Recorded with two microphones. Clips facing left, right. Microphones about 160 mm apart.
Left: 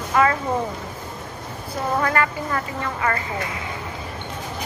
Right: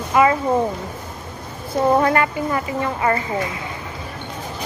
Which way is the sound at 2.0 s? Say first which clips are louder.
Right 4 dB; 20° right (ahead or behind).